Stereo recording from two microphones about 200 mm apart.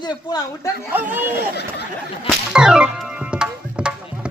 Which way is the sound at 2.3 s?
5° right (ahead or behind).